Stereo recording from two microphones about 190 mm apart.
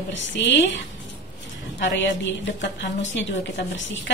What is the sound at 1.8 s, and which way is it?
A woman's voice, 70° left (ahead or behind).